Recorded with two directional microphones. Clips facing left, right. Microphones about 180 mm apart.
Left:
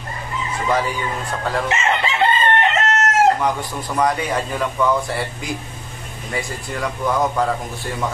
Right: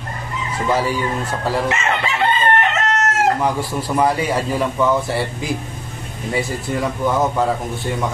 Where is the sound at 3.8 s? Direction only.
5° right (ahead or behind).